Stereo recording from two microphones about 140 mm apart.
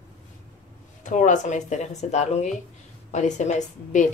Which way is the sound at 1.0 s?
65° left (ahead or behind).